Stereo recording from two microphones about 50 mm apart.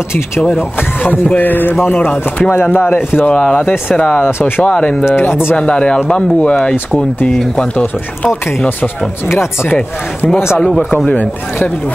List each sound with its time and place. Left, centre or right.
0.6 s speech: left
3.3 s speech: left
4.2 s speech: left
5.6 s speech: centre
11.1 s speech: left